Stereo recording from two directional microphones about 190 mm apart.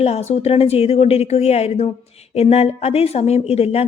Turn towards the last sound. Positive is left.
turn(degrees=35)  # may be behind; listen again after turning